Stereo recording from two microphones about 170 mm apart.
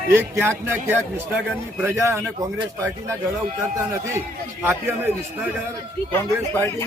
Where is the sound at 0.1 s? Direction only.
15° right (ahead or behind).